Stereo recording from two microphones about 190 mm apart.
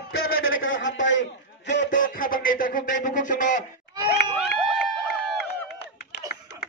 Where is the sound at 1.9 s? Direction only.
45° left (ahead or behind).